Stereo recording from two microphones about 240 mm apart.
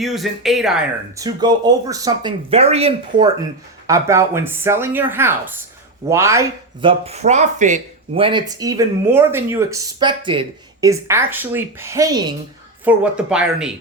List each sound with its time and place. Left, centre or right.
0.0 s speech: centre
1.1 s speech: centre
3.8 s speech: centre
7.0 s speech: right; by 13.7 s centre